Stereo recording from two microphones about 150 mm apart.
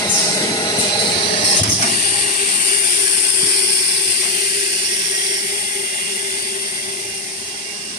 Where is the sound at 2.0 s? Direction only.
55° left (ahead or behind).